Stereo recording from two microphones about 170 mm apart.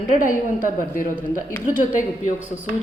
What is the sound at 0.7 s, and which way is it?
A woman's voice, 55° left (ahead or behind).